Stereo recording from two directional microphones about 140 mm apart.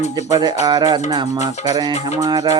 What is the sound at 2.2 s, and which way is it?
Music, 30° right (ahead or behind).